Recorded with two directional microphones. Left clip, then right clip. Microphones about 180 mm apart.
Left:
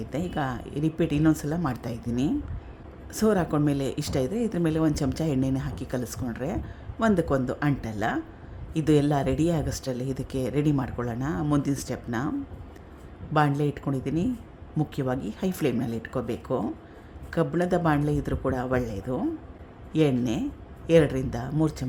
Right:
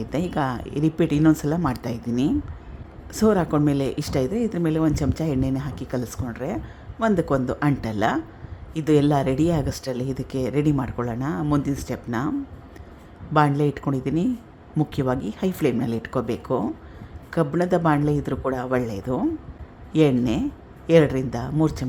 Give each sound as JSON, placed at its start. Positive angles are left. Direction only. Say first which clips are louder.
{"t": 0.0, "sound": "a woman's voice", "louder": "right 5 dB", "side_deg": -10}
{"t": 13.6, "sound": "a woman's voice", "louder": "right 5 dB", "side_deg": -10}